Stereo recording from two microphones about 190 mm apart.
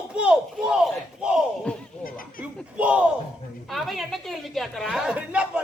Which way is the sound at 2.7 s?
5° right (ahead or behind).